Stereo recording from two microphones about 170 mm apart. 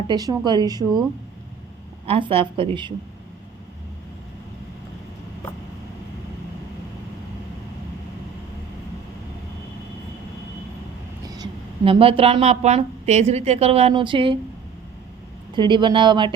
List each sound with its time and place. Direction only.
0.1 s a woman's voice: 25° right (ahead or behind)
2.0 s a woman's voice: 35° right (ahead or behind)
11.9 s a woman's voice: 35° right (ahead or behind)
15.5 s a woman's voice: 25° right (ahead or behind)